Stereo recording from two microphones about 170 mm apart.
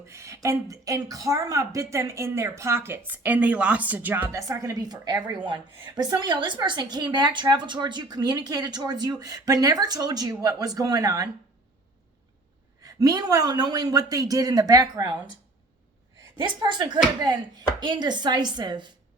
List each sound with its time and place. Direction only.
0.1 s speech: 15° right (ahead or behind)
12.8 s speech: 20° right (ahead or behind)
16.4 s speech: 25° right (ahead or behind)